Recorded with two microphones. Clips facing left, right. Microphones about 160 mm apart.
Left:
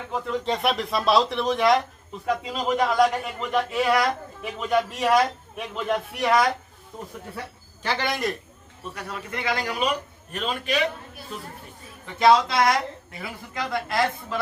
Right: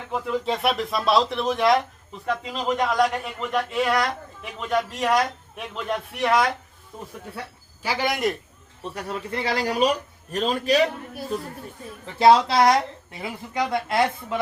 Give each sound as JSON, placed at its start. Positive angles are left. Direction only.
{"t": 0.1, "sound": "a man's voice", "side_deg": -5}
{"t": 8.8, "sound": "a man's voice", "side_deg": -30}
{"t": 12.2, "sound": "a woman's voice", "side_deg": -30}